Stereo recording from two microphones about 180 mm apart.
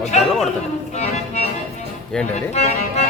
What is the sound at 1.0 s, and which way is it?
Music, 40° left (ahead or behind).